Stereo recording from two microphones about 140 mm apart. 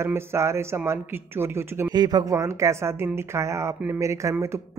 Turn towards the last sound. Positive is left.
turn(degrees=-20)  # may be behind; listen again after turning